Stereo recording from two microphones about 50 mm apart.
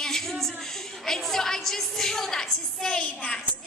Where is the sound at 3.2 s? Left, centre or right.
Left.